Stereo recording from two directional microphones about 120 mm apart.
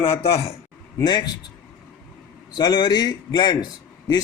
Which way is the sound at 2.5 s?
35° left (ahead or behind).